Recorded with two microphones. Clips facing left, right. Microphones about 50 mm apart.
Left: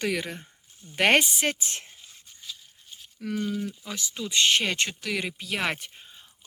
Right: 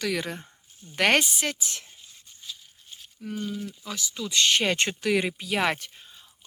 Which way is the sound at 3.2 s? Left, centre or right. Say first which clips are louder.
Left 4 dB; left.